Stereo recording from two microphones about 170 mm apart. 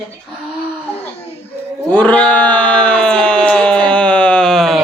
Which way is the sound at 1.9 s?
10° left (ahead or behind).